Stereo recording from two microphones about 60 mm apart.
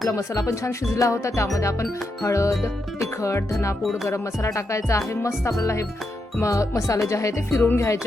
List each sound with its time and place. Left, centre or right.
0.2 s music: left